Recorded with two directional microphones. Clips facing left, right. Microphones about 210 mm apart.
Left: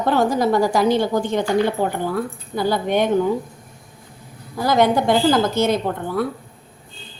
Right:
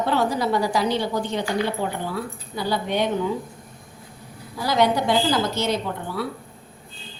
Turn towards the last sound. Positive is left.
turn(degrees=50)  # may be behind; listen again after turning